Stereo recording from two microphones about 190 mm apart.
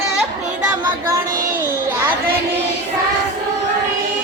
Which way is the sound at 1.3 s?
45° right (ahead or behind).